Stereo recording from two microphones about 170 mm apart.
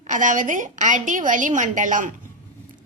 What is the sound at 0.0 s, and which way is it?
A woman's voice, 50° right (ahead or behind).